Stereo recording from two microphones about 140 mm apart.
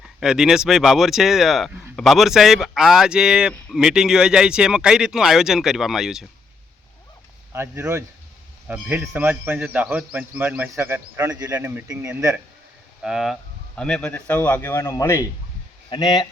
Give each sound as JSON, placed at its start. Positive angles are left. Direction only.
{"t": 0.0, "sound": "speech", "side_deg": -5}
{"t": 7.5, "sound": "speech", "side_deg": -15}
{"t": 13.0, "sound": "speech", "side_deg": -5}